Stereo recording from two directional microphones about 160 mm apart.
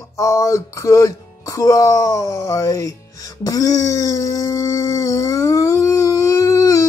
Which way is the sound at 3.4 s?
20° left (ahead or behind).